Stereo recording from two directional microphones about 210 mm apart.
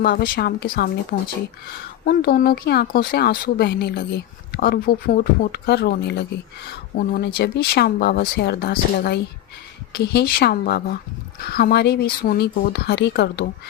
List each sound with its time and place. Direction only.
0.0 s speech: 50° left (ahead or behind)